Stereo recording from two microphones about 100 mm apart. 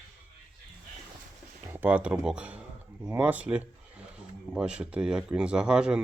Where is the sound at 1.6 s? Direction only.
20° right (ahead or behind).